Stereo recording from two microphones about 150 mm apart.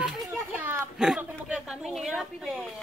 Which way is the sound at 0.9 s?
5° right (ahead or behind).